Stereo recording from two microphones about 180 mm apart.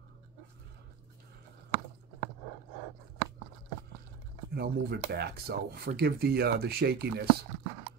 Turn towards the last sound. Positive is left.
turn(degrees=-65)  # may be behind; listen again after turning